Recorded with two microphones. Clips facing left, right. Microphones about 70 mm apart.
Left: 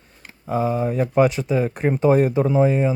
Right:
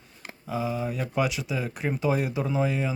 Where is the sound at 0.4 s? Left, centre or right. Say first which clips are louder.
Left 8 dB; left.